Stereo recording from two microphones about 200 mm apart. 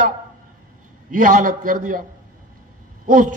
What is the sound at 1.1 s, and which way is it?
Speech, 40° right (ahead or behind).